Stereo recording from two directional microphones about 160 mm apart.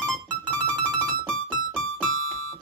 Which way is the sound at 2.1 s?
40° left (ahead or behind).